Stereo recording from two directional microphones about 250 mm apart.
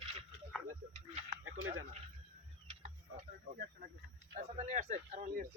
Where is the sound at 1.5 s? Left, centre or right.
Right.